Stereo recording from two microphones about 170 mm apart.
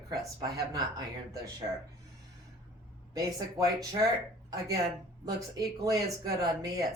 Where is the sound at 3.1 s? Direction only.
20° right (ahead or behind).